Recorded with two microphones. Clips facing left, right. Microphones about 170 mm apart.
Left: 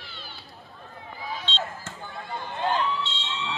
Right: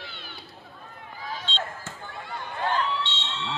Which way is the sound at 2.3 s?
25° left (ahead or behind).